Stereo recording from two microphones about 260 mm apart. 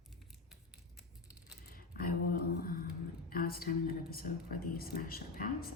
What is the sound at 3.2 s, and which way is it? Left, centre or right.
A woman's voice, left.